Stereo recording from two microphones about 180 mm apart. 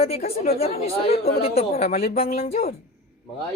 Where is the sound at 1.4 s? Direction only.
35° left (ahead or behind).